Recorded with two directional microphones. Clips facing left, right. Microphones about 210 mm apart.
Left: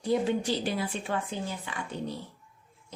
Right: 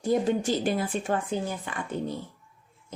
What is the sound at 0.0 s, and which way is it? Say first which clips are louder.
Speech: right 2 dB; 45° right (ahead or behind).